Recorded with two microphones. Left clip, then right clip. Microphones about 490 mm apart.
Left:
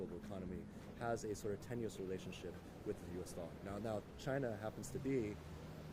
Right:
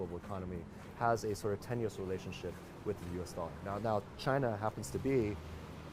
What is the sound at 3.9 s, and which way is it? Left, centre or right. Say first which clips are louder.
Speech: right 10 dB; right.